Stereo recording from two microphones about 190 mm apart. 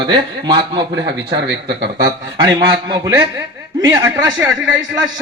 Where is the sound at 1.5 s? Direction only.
65° right (ahead or behind).